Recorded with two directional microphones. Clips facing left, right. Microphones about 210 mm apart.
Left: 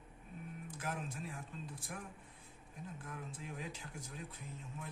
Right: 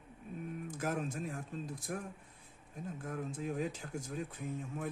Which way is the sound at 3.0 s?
45° right (ahead or behind).